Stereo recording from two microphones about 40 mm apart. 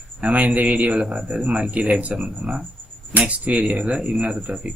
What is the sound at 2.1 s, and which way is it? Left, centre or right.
Speech, right.